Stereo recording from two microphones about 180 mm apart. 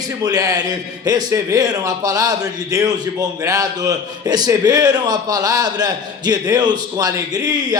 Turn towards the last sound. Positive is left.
turn(degrees=-20)  # may be behind; listen again after turning